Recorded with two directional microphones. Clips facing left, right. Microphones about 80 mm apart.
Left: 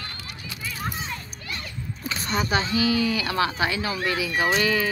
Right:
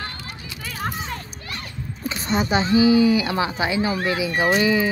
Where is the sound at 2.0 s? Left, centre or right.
Right.